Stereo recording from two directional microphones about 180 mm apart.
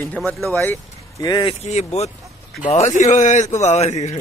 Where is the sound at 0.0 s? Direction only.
10° left (ahead or behind).